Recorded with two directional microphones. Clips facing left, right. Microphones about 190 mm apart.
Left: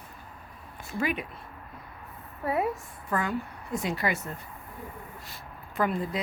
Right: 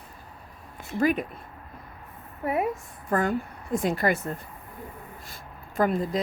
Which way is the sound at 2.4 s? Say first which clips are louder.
Right 1 dB; 20° right (ahead or behind).